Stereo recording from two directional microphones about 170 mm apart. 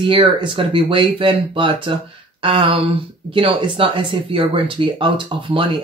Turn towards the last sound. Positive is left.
turn(degrees=-30)  # may be behind; listen again after turning